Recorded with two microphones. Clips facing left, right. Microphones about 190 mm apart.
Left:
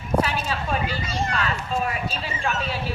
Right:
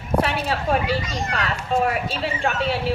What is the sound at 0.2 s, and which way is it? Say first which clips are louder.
A woman's voice: right 2 dB; 60° right (ahead or behind).